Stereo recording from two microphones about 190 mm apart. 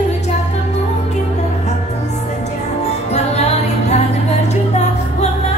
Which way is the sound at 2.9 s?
35° left (ahead or behind).